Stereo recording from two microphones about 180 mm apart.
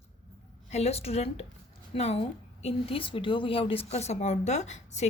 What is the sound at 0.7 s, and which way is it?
A woman's voice, 35° left (ahead or behind).